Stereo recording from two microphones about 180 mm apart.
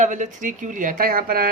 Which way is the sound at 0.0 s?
45° right (ahead or behind).